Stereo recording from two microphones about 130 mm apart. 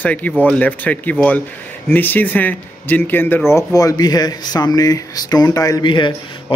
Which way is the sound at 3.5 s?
25° left (ahead or behind).